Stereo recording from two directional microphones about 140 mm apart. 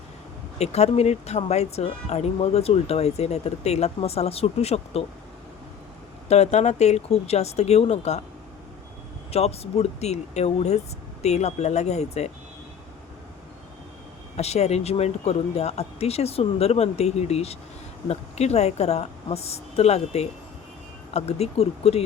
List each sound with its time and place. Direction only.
0.6 s speech: 50° left (ahead or behind)
6.2 s speech: 50° left (ahead or behind)
9.3 s speech: 50° left (ahead or behind)
14.3 s speech: 50° left (ahead or behind)